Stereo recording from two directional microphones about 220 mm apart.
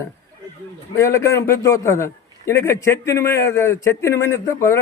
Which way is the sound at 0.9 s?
10° left (ahead or behind).